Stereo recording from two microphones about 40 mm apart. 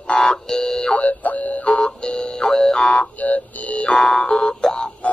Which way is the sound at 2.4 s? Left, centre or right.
Centre.